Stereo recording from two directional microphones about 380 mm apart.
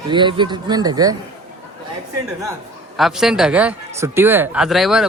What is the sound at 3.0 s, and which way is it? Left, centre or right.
Speech, centre.